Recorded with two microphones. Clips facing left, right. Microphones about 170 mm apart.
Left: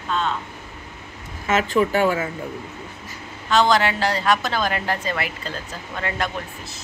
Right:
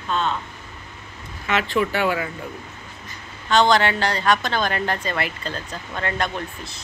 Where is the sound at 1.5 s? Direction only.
40° left (ahead or behind).